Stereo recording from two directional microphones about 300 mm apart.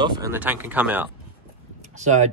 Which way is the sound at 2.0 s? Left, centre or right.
Right.